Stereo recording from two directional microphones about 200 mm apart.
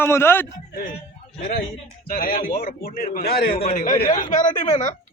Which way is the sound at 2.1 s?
45° left (ahead or behind).